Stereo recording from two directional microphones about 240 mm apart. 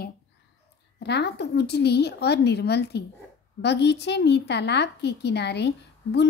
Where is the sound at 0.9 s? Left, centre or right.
Left.